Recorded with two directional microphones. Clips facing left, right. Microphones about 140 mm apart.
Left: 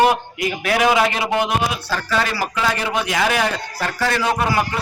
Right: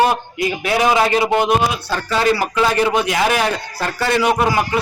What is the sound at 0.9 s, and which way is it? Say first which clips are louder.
Speech: right 3 dB; 30° right (ahead or behind).